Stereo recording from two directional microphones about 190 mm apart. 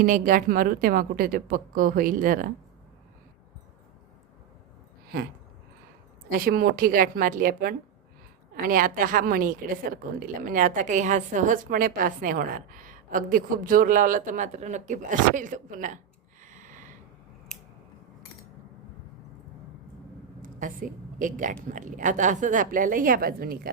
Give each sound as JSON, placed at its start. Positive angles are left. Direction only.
{"t": 0.0, "sound": "a woman's voice", "side_deg": -45}
{"t": 6.3, "sound": "a woman's voice", "side_deg": -50}
{"t": 16.5, "sound": "a sound", "side_deg": -40}
{"t": 20.4, "sound": "a woman's voice", "side_deg": -45}